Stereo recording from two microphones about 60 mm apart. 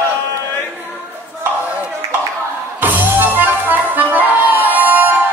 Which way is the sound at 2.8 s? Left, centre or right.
Right.